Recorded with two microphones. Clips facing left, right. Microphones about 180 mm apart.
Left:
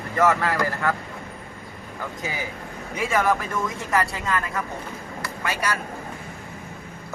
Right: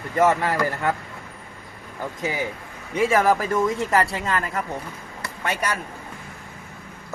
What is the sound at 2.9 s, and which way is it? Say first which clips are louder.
Speech: right 4 dB; 30° right (ahead or behind).